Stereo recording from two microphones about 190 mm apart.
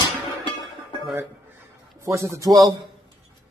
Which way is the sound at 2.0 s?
15° right (ahead or behind).